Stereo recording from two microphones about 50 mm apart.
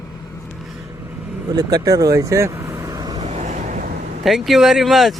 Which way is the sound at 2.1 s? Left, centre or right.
Right.